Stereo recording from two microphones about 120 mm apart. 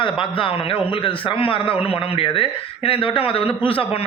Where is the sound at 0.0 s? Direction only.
45° left (ahead or behind).